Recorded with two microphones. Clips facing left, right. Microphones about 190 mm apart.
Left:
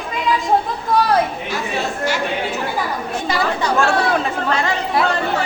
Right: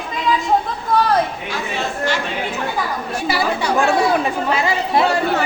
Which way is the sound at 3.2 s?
10° right (ahead or behind).